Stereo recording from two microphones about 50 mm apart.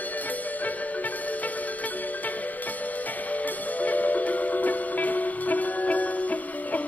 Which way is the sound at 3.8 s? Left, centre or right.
Left.